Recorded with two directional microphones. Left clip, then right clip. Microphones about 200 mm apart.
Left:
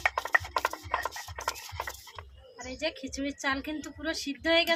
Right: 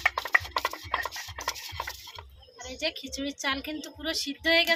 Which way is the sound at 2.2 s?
Centre (ahead or behind).